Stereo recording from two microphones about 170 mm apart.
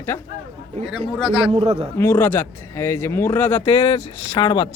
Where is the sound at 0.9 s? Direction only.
5° right (ahead or behind).